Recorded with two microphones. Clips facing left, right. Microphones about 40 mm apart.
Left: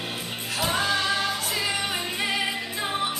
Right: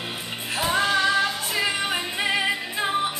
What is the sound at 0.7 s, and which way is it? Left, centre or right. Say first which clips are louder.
Music: right 3 dB; centre.